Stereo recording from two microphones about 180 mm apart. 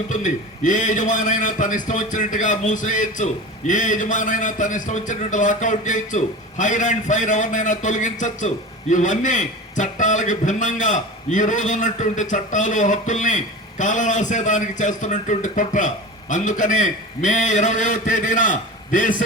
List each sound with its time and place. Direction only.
0.1 s a man's voice: 45° left (ahead or behind)